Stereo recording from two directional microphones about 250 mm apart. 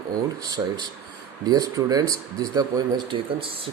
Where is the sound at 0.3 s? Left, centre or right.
Centre.